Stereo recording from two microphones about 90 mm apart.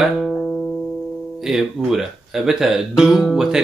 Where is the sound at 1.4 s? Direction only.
5° right (ahead or behind).